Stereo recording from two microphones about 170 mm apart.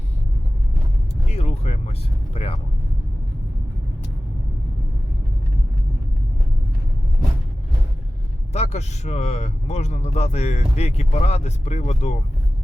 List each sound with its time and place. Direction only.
1.3 s speech: 40° left (ahead or behind)
8.5 s a man's voice: 40° left (ahead or behind)